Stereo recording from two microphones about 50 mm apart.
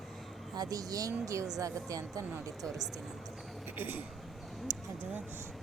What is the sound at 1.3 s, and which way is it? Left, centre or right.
Speech, right.